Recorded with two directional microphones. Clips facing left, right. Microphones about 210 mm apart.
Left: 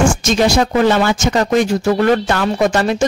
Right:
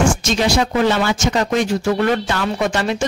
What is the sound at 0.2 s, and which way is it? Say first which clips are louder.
Speech: left 4 dB; 45° left (ahead or behind).